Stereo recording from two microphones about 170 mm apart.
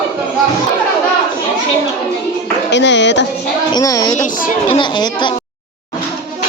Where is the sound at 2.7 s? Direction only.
90° left.